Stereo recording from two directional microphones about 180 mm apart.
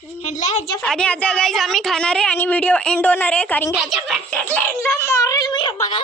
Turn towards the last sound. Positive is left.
turn(degrees=25)  # may be behind; listen again after turning